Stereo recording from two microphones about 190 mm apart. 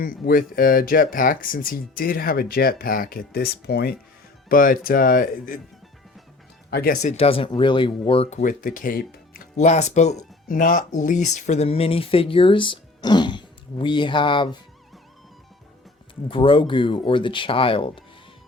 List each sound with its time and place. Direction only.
0.0 s speech: 45° left (ahead or behind)
6.7 s speech: 55° left (ahead or behind); by 14.5 s 25° left (ahead or behind)
16.3 s speech: 25° left (ahead or behind)